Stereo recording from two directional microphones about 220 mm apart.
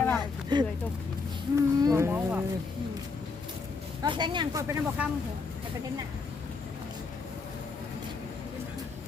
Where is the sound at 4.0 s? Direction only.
20° right (ahead or behind).